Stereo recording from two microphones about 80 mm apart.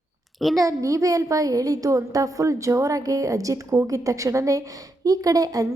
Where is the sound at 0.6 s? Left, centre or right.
Right.